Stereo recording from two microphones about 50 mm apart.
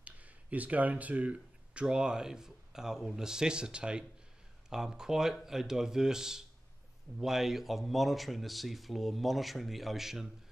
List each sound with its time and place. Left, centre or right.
0.0 s speech: right; by 10.2 s centre